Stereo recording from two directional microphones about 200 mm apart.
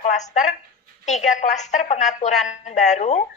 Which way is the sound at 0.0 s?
35° left (ahead or behind).